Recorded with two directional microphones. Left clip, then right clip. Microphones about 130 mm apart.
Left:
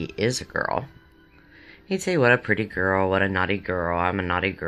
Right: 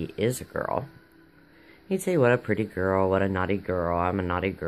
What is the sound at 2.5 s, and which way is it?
Speech, 10° right (ahead or behind).